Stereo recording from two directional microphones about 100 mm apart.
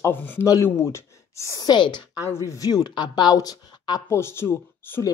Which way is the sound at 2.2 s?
30° left (ahead or behind).